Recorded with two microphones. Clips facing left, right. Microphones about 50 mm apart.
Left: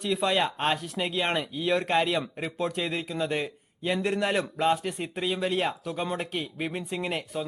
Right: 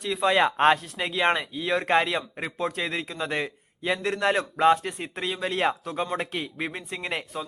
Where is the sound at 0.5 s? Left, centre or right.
Right.